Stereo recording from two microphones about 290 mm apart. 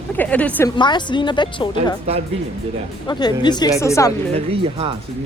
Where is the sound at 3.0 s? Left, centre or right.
Centre.